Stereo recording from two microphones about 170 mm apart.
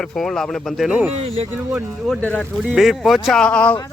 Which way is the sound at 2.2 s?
10° left (ahead or behind).